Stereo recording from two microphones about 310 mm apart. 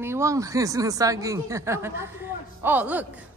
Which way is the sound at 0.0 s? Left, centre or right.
Centre.